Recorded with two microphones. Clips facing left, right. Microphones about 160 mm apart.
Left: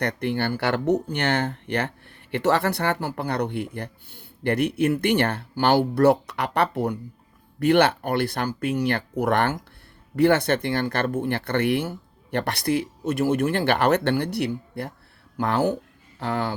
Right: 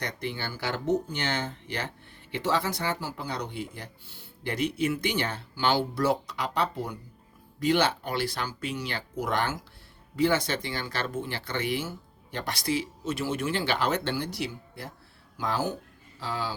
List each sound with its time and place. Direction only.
0.0 s speech: 60° left (ahead or behind)